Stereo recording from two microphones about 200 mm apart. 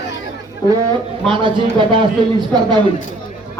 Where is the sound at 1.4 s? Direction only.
25° right (ahead or behind).